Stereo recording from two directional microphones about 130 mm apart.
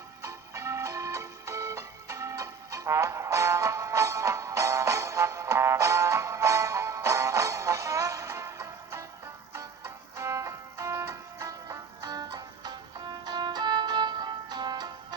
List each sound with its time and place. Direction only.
0.2 s music: 20° right (ahead or behind)